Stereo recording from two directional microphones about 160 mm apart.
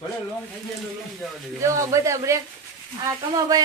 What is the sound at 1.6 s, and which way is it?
Speech, 20° right (ahead or behind).